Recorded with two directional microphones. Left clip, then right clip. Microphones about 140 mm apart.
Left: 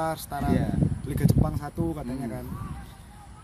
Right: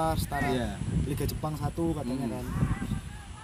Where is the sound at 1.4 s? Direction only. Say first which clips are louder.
Even; 5° right (ahead or behind).